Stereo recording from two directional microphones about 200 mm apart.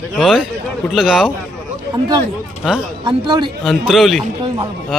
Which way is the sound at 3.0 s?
25° right (ahead or behind).